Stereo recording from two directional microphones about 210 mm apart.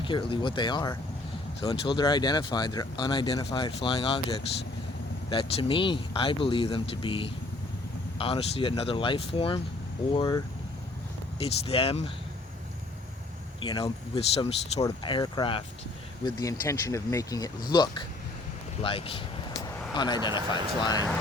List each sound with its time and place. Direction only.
0.0 s speech: 25° left (ahead or behind)
13.6 s speech: 25° left (ahead or behind)